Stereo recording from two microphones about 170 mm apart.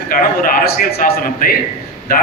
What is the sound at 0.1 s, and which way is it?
A man's voice, 55° left (ahead or behind).